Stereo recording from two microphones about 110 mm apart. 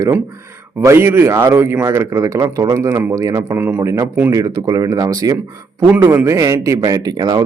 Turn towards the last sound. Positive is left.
turn(degrees=-35)  # may be behind; listen again after turning